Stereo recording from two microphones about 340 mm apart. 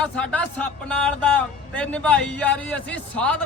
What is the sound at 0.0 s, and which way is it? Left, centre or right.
Speech, centre.